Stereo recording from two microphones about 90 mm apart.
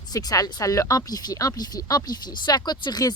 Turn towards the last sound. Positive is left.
turn(degrees=50)  # may be behind; listen again after turning